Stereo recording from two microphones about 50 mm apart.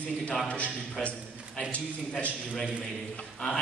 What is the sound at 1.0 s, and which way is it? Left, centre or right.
Speech, centre.